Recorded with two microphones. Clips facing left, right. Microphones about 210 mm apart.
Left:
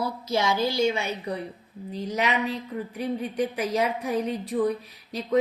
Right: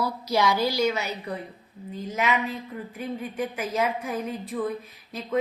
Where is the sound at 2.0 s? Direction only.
40° left (ahead or behind).